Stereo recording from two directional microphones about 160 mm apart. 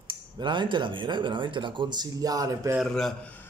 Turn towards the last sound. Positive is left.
turn(degrees=0)  # may be behind; listen again after turning